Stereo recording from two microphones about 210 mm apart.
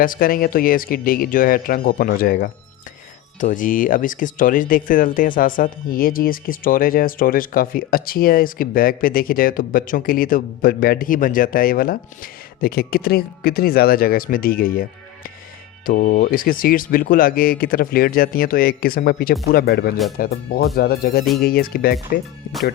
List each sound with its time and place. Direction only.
0.0 s speech: 40° left (ahead or behind)
15.9 s speech: 45° left (ahead or behind)